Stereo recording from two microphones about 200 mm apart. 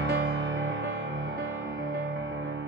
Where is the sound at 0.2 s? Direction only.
65° right (ahead or behind).